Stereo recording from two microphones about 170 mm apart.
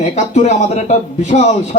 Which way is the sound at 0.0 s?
40° left (ahead or behind).